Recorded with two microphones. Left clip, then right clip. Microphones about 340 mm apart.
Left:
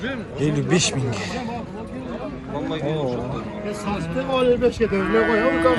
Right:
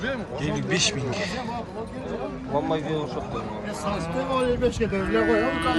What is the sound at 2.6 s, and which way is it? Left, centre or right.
Speech, right.